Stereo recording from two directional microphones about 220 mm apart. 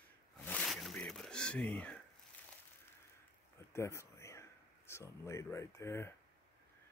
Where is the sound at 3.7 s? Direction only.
10° left (ahead or behind).